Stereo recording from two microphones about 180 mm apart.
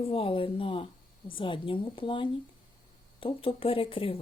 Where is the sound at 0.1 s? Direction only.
30° left (ahead or behind).